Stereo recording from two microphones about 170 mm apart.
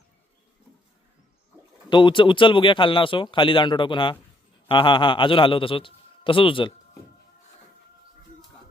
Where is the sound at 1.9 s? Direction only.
30° left (ahead or behind).